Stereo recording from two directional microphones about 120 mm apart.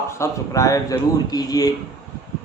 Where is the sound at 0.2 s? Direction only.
25° left (ahead or behind).